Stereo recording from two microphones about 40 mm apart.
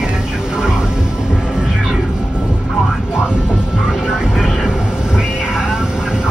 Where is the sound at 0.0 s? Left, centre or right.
Centre.